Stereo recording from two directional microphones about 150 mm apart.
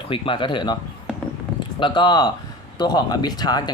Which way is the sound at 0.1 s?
35° left (ahead or behind).